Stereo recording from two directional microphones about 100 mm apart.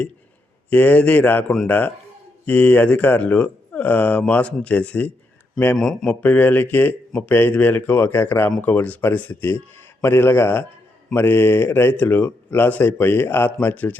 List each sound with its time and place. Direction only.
0.7 s speech: 15° left (ahead or behind)
5.7 s speech: centre (ahead or behind)
6.2 s speech: 15° left (ahead or behind)